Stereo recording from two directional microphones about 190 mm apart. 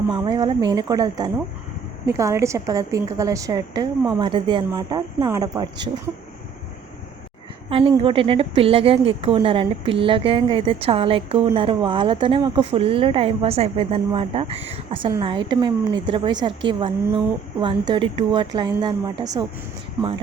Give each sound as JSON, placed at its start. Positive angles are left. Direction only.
{"t": 0.1, "sound": "a woman's voice", "side_deg": -25}
{"t": 7.7, "sound": "a woman's voice", "side_deg": -30}